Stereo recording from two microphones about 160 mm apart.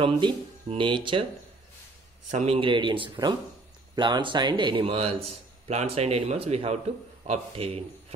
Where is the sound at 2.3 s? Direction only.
45° right (ahead or behind).